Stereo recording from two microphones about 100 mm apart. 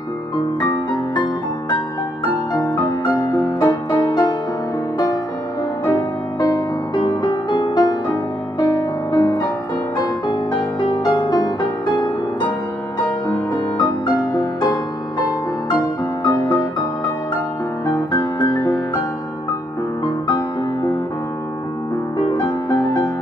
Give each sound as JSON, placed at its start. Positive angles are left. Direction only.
{"t": 2.5, "sound": "music", "side_deg": 40}
{"t": 5.9, "sound": "music", "side_deg": 40}
{"t": 14.0, "sound": "music", "side_deg": 45}
{"t": 16.3, "sound": "music", "side_deg": 40}
{"t": 17.9, "sound": "music", "side_deg": 40}
{"t": 20.2, "sound": "music", "side_deg": 40}